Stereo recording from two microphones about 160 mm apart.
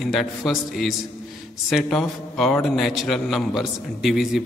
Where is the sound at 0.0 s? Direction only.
Centre (ahead or behind).